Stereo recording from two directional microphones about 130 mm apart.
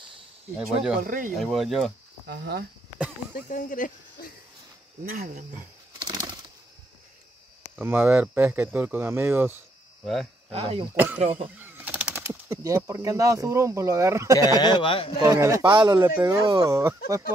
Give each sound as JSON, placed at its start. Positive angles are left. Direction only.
{"t": 0.6, "sound": "speech", "side_deg": -5}
{"t": 1.0, "sound": "speech", "side_deg": -90}
{"t": 1.3, "sound": "speech", "side_deg": 0}
{"t": 3.3, "sound": "speech", "side_deg": 85}
{"t": 5.9, "sound": "bird", "side_deg": -30}
{"t": 7.7, "sound": "speech", "side_deg": -15}
{"t": 10.5, "sound": "speech", "side_deg": -50}
{"t": 11.5, "sound": "bird", "side_deg": -15}
{"t": 12.3, "sound": "speech", "side_deg": -25}
{"t": 14.6, "sound": "speech", "side_deg": 40}
{"t": 15.1, "sound": "speech", "side_deg": -30}
{"t": 15.7, "sound": "speech", "side_deg": -35}